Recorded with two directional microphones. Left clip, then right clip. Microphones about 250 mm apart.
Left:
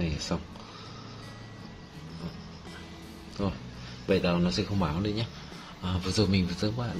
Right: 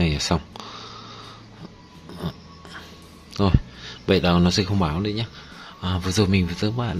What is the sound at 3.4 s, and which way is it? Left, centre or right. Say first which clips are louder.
Speech: right 11 dB; right.